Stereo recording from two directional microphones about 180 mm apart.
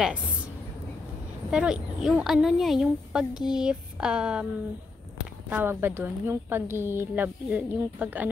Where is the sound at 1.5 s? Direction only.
5° right (ahead or behind).